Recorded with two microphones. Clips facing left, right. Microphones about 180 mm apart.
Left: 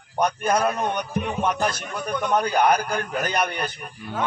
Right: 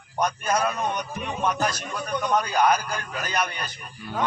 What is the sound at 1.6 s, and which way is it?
Speech, 55° left (ahead or behind).